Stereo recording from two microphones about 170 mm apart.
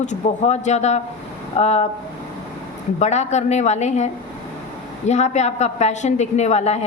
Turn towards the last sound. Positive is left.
turn(degrees=40)  # may be behind; listen again after turning